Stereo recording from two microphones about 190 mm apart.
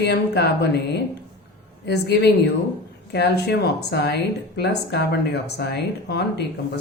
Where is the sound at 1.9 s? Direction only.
60° left (ahead or behind).